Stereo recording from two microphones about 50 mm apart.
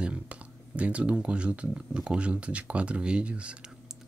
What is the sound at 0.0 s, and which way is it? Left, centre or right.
Speech, right.